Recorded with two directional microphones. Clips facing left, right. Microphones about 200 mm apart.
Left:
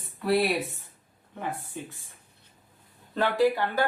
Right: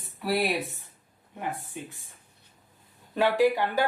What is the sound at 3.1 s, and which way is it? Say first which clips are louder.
Speech: right 1 dB; 10° right (ahead or behind).